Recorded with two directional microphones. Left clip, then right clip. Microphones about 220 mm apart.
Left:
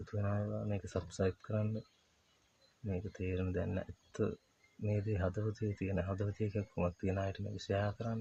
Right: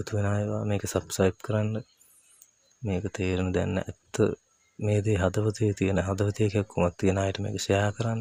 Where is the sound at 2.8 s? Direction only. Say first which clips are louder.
Right 12 dB; 45° right (ahead or behind).